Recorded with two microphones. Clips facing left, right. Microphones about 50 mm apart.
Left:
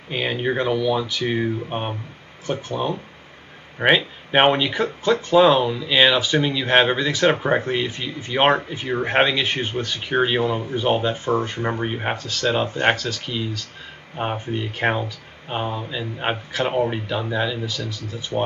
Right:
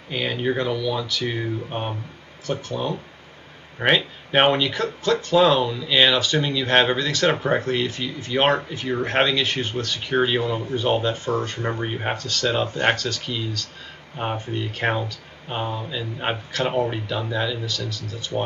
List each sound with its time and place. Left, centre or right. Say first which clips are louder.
0.1 s speech: left 1 dB; centre